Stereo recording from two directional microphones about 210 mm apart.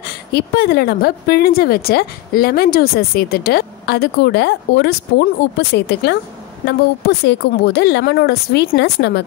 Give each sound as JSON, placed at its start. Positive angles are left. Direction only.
{"t": 0.0, "sound": "a woman's voice", "side_deg": 50}